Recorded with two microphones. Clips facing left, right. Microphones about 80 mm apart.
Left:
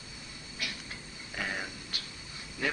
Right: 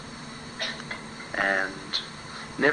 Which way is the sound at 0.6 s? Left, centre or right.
Right.